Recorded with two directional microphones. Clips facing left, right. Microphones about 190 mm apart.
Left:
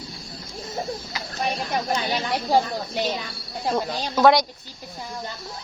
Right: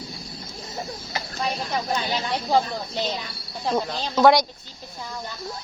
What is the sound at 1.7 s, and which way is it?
Speech, 15° left (ahead or behind).